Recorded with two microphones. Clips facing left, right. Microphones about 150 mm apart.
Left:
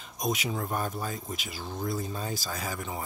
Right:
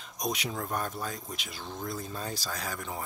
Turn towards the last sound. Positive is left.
turn(degrees=5)  # may be behind; listen again after turning